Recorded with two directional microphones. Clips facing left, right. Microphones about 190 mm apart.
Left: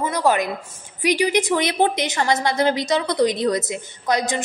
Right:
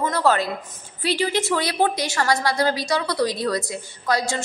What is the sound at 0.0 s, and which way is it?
A woman's voice, 15° left (ahead or behind).